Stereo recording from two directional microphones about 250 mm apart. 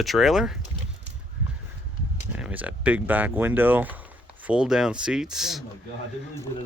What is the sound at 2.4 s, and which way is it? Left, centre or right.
Speech, centre.